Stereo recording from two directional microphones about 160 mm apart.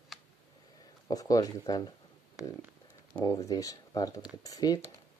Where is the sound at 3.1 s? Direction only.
20° left (ahead or behind).